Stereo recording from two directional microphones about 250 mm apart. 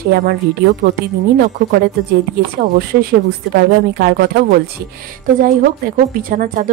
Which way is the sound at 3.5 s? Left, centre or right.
Right.